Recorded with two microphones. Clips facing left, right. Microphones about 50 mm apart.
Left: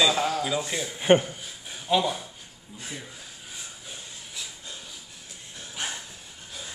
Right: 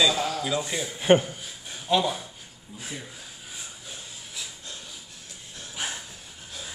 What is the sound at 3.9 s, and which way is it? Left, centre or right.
Breathing, centre.